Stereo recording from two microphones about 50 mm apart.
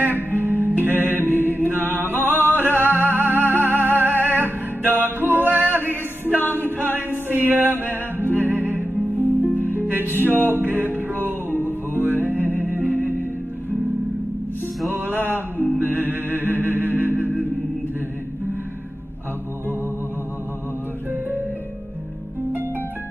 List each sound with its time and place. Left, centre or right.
0.0 s music: right
1.4 s mantra: right
2.0 s music: right
6.5 s a capella: right
10.2 s music: right
14.9 s mantra: right
16.3 s music: right